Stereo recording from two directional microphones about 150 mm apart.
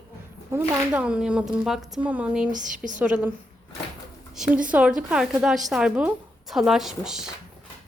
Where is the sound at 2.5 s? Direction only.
60° right (ahead or behind).